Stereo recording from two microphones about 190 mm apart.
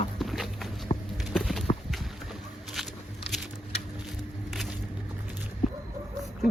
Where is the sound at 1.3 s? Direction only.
Centre (ahead or behind).